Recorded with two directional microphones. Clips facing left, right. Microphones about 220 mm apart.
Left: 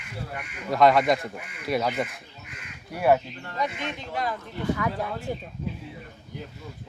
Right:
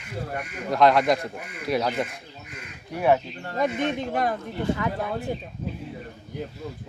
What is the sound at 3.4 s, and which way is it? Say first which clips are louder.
Speech: right 6 dB; 45° right (ahead or behind).